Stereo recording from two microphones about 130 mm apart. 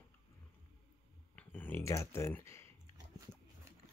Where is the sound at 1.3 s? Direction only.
15° left (ahead or behind).